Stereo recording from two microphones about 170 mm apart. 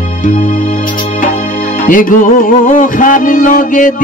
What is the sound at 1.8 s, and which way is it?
Music, 50° left (ahead or behind).